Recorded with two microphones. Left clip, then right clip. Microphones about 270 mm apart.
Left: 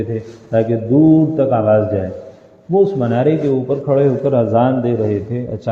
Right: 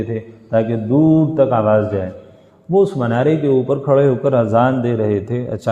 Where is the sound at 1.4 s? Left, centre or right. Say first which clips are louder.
Even; right.